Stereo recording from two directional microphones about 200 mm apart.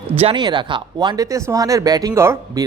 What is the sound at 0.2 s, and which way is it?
Speech, 25° right (ahead or behind).